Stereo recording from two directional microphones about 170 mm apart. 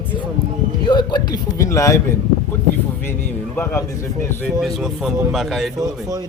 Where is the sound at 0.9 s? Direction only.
25° left (ahead or behind).